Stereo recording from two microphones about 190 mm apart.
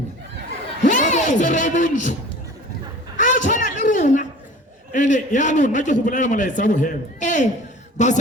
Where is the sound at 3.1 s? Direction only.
40° left (ahead or behind).